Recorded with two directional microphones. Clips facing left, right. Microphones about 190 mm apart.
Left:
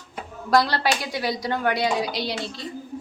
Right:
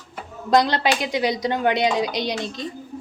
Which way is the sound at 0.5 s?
20° right (ahead or behind).